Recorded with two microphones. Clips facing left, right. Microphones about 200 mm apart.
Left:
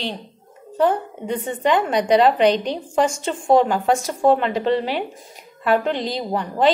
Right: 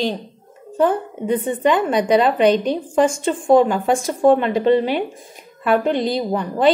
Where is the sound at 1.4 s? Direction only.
55° right (ahead or behind).